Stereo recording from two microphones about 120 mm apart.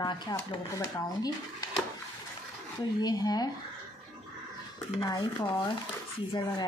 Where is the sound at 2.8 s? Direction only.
35° left (ahead or behind).